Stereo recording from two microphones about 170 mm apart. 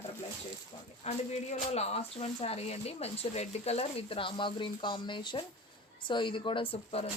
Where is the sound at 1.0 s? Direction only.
40° left (ahead or behind).